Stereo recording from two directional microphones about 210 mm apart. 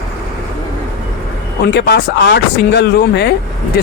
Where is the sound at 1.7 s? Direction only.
55° left (ahead or behind).